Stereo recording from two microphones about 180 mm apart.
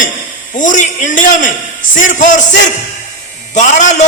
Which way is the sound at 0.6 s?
45° left (ahead or behind).